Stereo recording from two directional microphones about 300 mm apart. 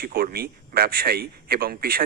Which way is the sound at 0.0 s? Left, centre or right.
Right.